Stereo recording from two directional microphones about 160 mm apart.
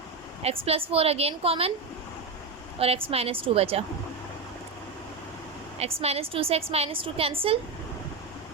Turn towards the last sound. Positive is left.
turn(degrees=-35)  # may be behind; listen again after turning